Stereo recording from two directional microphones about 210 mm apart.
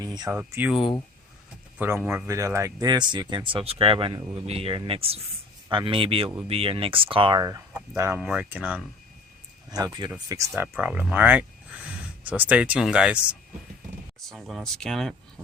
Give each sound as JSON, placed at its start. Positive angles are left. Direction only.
{"t": 0.0, "sound": "a sound", "side_deg": -20}
{"t": 0.3, "sound": "speech", "side_deg": -10}
{"t": 9.6, "sound": "speech", "side_deg": -20}